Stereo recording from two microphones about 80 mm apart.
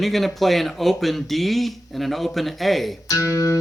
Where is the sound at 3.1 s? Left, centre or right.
Left.